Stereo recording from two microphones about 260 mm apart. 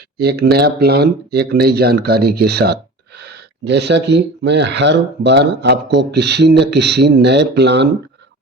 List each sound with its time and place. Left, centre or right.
0.2 s speech: right